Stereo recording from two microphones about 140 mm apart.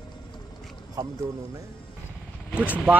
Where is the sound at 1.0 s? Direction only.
25° right (ahead or behind).